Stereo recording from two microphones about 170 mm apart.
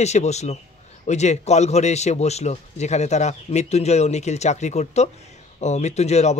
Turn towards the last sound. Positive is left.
turn(degrees=40)  # may be behind; listen again after turning